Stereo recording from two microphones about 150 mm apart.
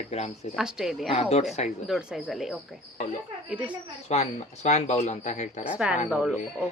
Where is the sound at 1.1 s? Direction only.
45° left (ahead or behind).